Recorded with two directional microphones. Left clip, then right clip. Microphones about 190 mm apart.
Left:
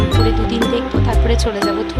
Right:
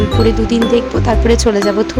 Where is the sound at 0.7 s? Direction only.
30° right (ahead or behind).